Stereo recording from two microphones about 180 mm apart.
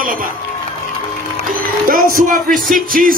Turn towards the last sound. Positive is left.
turn(degrees=-50)  # may be behind; listen again after turning